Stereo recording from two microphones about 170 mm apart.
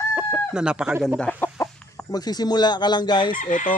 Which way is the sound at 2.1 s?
25° left (ahead or behind).